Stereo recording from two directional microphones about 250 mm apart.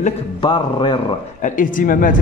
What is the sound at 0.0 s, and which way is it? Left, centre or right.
Speech, centre.